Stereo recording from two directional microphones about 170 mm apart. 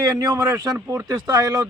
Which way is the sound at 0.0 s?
20° right (ahead or behind).